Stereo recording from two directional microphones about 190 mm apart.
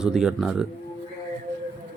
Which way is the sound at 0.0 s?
5° right (ahead or behind).